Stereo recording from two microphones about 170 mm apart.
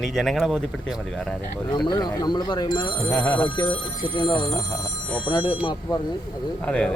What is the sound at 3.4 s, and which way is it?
Speech, 25° left (ahead or behind).